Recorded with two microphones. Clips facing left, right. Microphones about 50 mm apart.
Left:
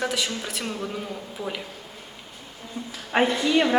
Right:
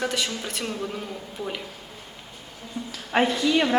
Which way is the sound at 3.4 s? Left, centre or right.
Centre.